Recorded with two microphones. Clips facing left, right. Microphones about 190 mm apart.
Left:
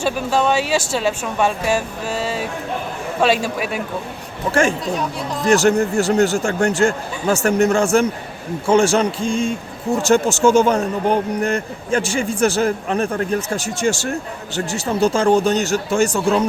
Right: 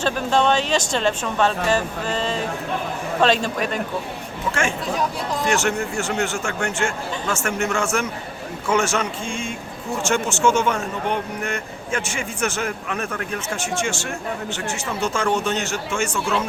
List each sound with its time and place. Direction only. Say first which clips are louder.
0.0 s speech: left 1 dB; 5° left (ahead or behind)
4.5 s speech: left 6 dB; 30° left (ahead or behind)